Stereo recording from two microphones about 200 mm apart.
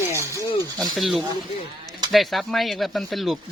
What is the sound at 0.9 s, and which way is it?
Speech, centre (ahead or behind).